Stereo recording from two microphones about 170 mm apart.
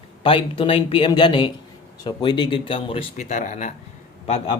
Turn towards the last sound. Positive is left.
turn(degrees=40)  # may be behind; listen again after turning